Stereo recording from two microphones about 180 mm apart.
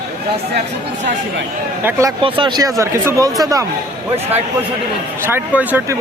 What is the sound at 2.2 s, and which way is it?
Speech, 30° right (ahead or behind).